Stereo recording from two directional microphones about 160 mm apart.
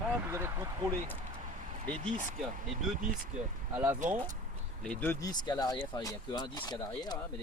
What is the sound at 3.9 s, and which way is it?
Speech, 50° right (ahead or behind).